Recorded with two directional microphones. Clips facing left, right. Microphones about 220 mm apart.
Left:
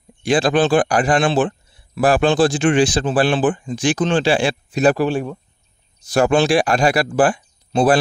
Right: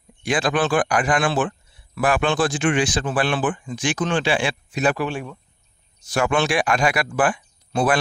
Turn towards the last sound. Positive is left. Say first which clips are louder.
# left 5 dB
turn(degrees=30)  # may be behind; listen again after turning